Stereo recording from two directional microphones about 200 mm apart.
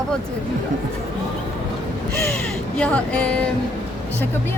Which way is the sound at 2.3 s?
5° left (ahead or behind).